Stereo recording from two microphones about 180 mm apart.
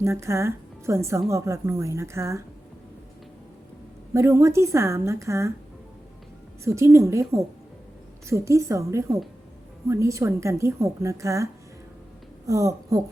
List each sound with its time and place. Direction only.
0.0 s a woman's voice: 15° right (ahead or behind)
4.1 s a woman's voice: 15° right (ahead or behind)
6.7 s a woman's voice: 15° right (ahead or behind)
12.5 s speech: 20° right (ahead or behind)